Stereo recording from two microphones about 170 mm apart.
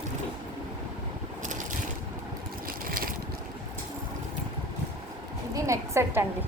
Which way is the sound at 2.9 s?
60° right (ahead or behind).